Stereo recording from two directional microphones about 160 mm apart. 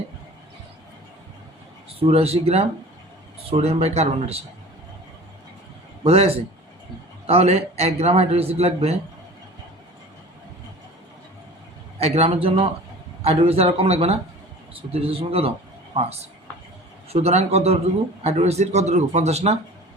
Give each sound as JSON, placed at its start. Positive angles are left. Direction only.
{"t": 2.0, "sound": "a man's voice", "side_deg": -40}
{"t": 6.0, "sound": "a man's voice", "side_deg": -35}
{"t": 11.9, "sound": "a man's voice", "side_deg": -40}